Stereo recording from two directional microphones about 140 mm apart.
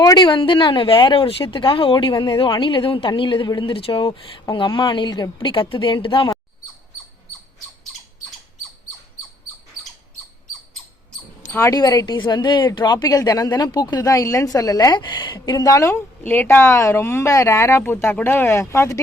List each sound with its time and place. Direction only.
0.0 s speech: 30° left (ahead or behind)
11.5 s a woman's voice: 25° left (ahead or behind)